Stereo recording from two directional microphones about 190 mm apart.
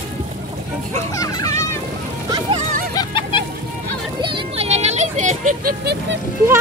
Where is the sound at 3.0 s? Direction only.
25° left (ahead or behind).